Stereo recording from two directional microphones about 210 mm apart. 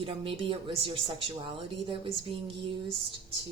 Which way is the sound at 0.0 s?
25° right (ahead or behind).